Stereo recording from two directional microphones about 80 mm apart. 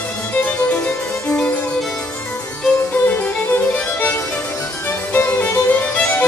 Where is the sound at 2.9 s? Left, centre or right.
Left.